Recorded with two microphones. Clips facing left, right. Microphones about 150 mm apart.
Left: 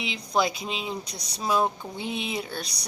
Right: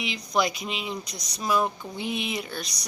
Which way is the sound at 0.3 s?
30° left (ahead or behind).